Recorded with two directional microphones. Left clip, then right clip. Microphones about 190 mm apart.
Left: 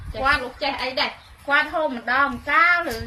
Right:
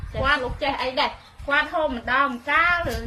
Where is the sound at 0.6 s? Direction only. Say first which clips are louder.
Even; 15° left (ahead or behind).